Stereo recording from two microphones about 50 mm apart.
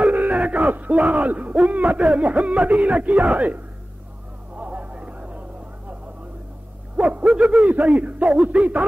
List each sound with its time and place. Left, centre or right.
0.0 s a sound: right
1.1 s speech: right
4.6 s music: right
7.0 s hoot: right
7.2 s speech: centre